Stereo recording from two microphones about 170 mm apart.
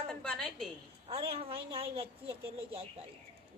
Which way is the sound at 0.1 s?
5° left (ahead or behind).